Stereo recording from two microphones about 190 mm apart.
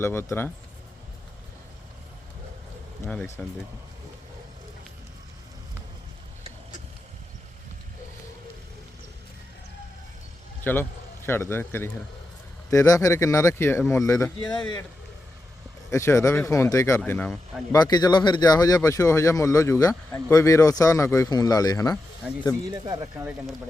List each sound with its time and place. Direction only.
0.0 s speech: 15° left (ahead or behind)
3.1 s speech: 10° left (ahead or behind)
10.6 s speech: 10° left (ahead or behind)
15.9 s speech: 15° left (ahead or behind)
17.7 s speech: 20° left (ahead or behind)
22.7 s speech: 20° right (ahead or behind)